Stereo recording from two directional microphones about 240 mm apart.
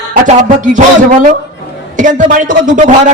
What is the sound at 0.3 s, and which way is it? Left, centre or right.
Speech, right.